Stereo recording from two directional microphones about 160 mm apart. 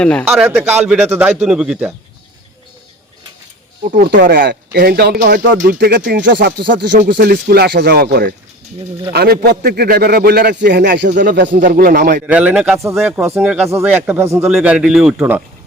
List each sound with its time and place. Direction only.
0.0 s a man's voice: 10° left (ahead or behind)
0.3 s a man's voice: 10° right (ahead or behind)
3.9 s a man's voice: 65° right (ahead or behind)
6.1 s speech: 90° right
7.1 s a man's voice: 70° right (ahead or behind)
11.3 s a man's voice: 65° right (ahead or behind)
12.2 s a man's voice: 10° right (ahead or behind)